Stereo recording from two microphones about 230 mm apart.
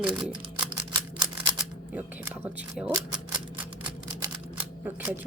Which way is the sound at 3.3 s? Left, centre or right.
Centre.